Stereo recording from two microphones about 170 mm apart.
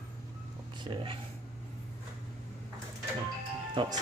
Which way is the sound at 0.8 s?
30° right (ahead or behind).